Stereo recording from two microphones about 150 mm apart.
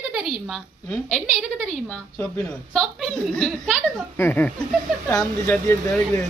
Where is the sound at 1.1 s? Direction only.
Centre (ahead or behind).